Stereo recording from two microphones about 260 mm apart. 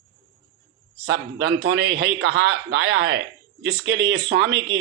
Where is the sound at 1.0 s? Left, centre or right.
Right.